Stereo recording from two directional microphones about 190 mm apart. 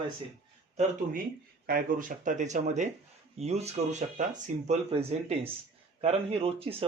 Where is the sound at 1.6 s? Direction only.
50° right (ahead or behind).